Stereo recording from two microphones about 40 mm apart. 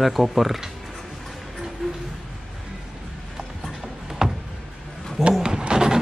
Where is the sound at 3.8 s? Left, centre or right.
Centre.